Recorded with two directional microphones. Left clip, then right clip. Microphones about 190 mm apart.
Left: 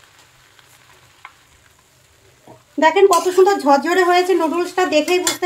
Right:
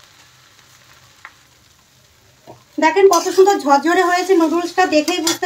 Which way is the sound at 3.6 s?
35° left (ahead or behind).